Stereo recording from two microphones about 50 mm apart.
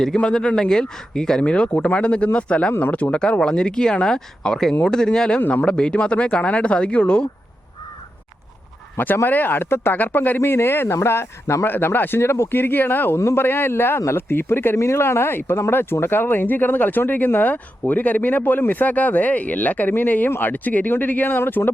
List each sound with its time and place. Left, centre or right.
0.2 s speech: centre
5.4 s speech: left
5.6 s speech: centre
9.2 s speech: left
10.0 s speech: left
11.7 s speech: left
12.2 s speech: left
14.8 s speech: left